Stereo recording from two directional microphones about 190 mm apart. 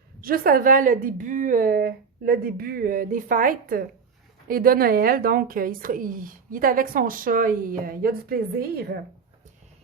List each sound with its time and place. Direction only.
0.2 s a woman's voice: 50° right (ahead or behind)